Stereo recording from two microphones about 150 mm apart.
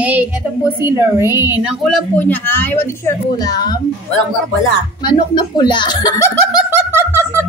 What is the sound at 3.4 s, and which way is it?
Speech, 25° left (ahead or behind).